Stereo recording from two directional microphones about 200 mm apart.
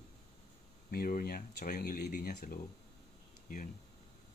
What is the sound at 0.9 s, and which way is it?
Speech, 45° left (ahead or behind).